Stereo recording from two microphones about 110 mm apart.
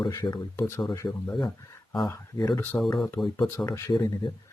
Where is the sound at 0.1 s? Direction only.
30° left (ahead or behind).